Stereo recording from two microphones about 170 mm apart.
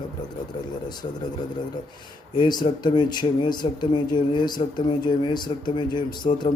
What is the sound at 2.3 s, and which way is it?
Speech, 25° left (ahead or behind).